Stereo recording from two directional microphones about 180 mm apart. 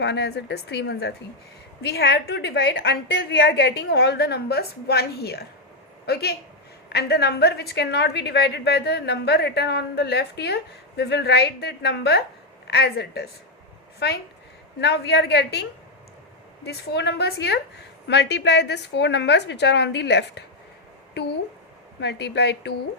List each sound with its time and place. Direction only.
0.0 s a woman's voice: 70° left (ahead or behind)
16.6 s a woman's voice: 70° left (ahead or behind)
22.0 s a woman's voice: 70° left (ahead or behind)